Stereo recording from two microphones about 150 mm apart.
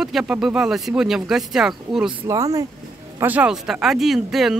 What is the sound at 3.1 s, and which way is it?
Speech, 10° right (ahead or behind).